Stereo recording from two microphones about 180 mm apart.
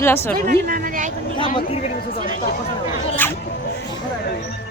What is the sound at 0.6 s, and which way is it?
Speech, 55° right (ahead or behind).